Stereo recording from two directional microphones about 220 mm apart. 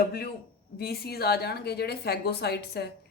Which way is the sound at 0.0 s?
45° left (ahead or behind).